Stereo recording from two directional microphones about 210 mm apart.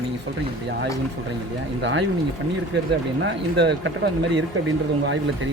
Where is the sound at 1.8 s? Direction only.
60° right (ahead or behind).